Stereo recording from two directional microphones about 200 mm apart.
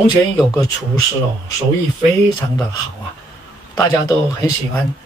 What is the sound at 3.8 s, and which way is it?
Speech, 20° left (ahead or behind).